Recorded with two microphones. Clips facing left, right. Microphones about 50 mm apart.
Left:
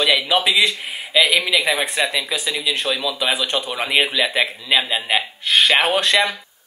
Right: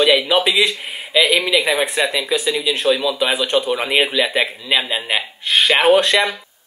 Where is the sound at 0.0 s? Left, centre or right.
Centre.